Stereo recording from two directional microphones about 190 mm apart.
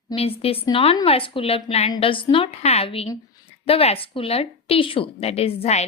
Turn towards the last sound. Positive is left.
turn(degrees=35)  # may be behind; listen again after turning